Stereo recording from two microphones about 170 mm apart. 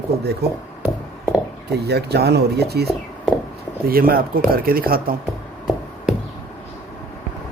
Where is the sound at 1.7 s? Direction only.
70° right (ahead or behind).